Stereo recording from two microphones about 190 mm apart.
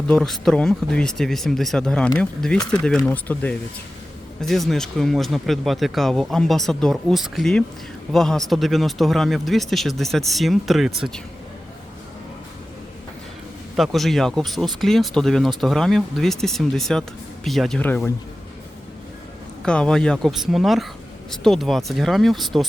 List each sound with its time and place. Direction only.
0.1 s speech: centre (ahead or behind)
13.7 s speech: centre (ahead or behind)
19.6 s speech: 5° left (ahead or behind)